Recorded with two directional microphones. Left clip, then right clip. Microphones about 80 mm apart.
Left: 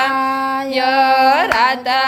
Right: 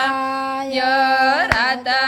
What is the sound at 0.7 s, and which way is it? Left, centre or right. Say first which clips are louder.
Carnatic music: left 3 dB; left.